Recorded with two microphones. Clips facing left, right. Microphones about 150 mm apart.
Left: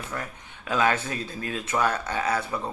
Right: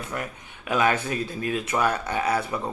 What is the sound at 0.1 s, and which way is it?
Speech, 15° right (ahead or behind).